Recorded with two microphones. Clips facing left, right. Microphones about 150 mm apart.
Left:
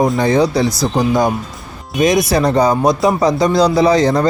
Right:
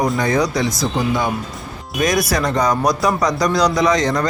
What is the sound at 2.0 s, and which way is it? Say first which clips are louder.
Speech: left 5 dB; 20° left (ahead or behind).